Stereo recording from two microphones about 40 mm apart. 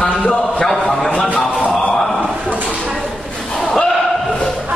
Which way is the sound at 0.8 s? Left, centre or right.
Centre.